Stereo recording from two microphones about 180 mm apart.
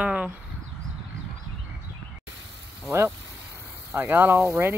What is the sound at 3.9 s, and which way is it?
Speech, 10° right (ahead or behind).